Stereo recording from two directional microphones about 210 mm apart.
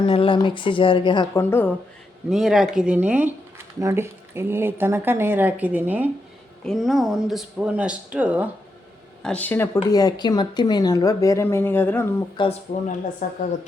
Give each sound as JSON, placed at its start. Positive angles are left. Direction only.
{"t": 0.0, "sound": "speech", "side_deg": 25}
{"t": 2.3, "sound": "speech", "side_deg": 0}
{"t": 9.2, "sound": "speech", "side_deg": 5}
{"t": 12.4, "sound": "speech", "side_deg": 20}
{"t": 13.2, "sound": "a woman's voice", "side_deg": 40}